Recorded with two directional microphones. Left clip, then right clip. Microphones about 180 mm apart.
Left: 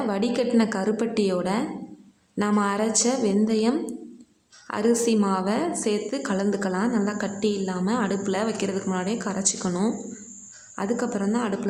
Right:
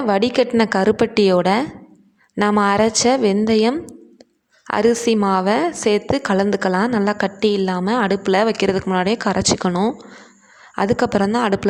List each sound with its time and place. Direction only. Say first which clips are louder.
0.1 s a woman's voice: right 10 dB; 45° right (ahead or behind)